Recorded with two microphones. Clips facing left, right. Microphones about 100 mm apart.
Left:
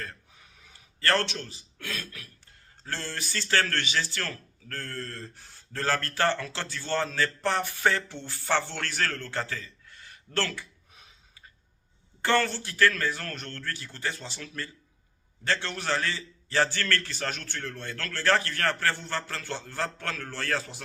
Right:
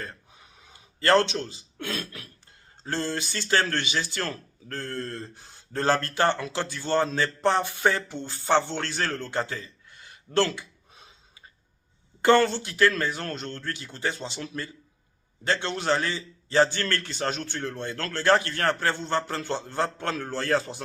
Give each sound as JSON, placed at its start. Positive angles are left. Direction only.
{"t": 0.0, "sound": "a sound", "side_deg": -20}
{"t": 2.8, "sound": "speech", "side_deg": -20}
{"t": 12.2, "sound": "speech", "side_deg": -20}